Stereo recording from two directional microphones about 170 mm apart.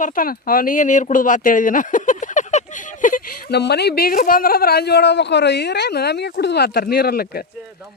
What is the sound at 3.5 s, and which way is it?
Speech, 75° left (ahead or behind).